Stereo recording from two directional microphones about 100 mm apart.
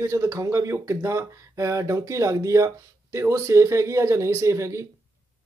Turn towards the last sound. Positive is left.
turn(degrees=-30)  # may be behind; listen again after turning